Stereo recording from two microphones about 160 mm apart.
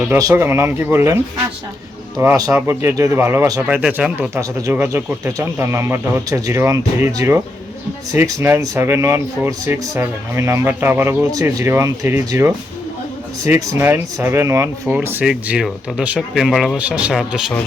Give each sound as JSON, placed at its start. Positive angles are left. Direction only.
{"t": 0.2, "sound": "speech", "side_deg": -20}
{"t": 4.4, "sound": "speech", "side_deg": -15}